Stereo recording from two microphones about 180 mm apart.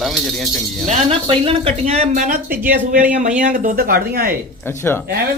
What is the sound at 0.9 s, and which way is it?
Speech, 30° right (ahead or behind).